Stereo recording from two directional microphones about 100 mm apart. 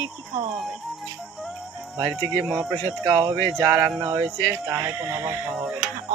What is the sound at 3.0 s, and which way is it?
Speech, 55° right (ahead or behind).